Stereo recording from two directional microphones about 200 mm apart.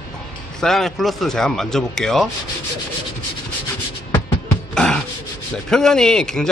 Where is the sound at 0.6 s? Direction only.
Centre (ahead or behind).